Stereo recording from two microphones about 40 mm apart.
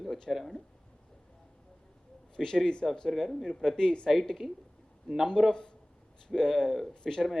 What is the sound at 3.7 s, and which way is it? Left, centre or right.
Speech, left.